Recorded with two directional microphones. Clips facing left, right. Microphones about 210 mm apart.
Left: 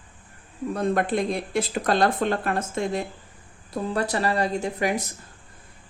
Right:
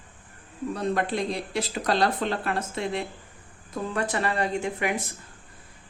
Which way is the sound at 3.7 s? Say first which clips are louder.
Left 3 dB; 35° left (ahead or behind).